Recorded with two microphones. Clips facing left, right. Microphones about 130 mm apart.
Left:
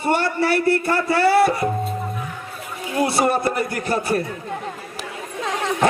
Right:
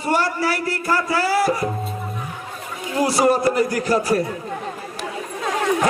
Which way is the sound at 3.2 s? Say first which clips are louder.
Right 6 dB; 55° left (ahead or behind).